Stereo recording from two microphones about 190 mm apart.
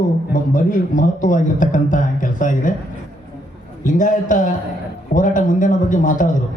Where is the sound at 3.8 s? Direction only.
45° left (ahead or behind).